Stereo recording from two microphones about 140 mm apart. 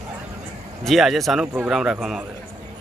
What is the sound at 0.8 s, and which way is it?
A man's voice, centre (ahead or behind).